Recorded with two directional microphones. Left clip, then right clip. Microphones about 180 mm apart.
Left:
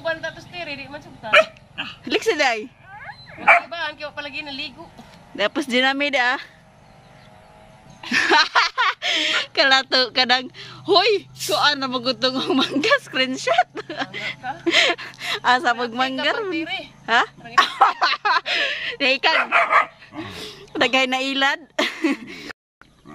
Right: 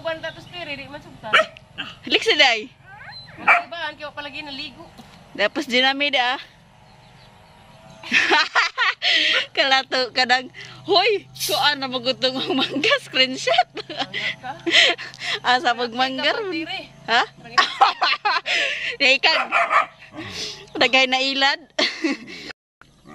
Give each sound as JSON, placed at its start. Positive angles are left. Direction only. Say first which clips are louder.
{"t": 0.0, "sound": "a sound", "louder": "left 2 dB", "side_deg": 5}
{"t": 1.3, "sound": "hiccup", "louder": "left 2 dB", "side_deg": 55}
{"t": 2.0, "sound": "speech", "louder": "right 3 dB", "side_deg": 10}
{"t": 3.0, "sound": "dog", "louder": "left 1 dB", "side_deg": 60}
{"t": 3.7, "sound": "a man's voice", "louder": "left 2 dB", "side_deg": 5}
{"t": 8.1, "sound": "speech", "louder": "left 1 dB", "side_deg": 10}
{"t": 19.3, "sound": "speech", "louder": "left 2 dB", "side_deg": 55}
{"t": 20.2, "sound": "speech", "louder": "right 2 dB", "side_deg": 15}